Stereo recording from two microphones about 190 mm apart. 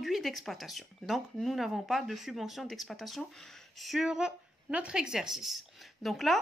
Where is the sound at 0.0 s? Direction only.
Centre (ahead or behind).